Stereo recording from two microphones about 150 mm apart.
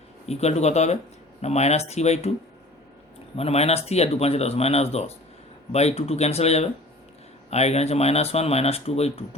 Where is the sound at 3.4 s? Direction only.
45° left (ahead or behind).